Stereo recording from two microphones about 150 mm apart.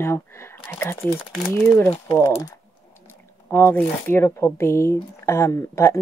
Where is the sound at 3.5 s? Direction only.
15° left (ahead or behind).